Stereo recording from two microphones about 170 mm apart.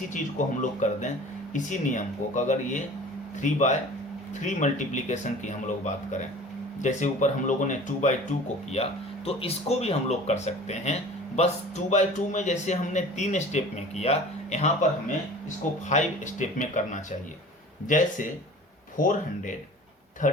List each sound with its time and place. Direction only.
0.1 s a man's voice: 50° left (ahead or behind)
15.9 s a man's voice: 45° left (ahead or behind)